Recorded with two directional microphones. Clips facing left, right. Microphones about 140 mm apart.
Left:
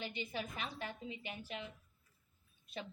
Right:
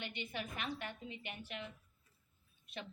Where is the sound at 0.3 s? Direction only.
35° left (ahead or behind).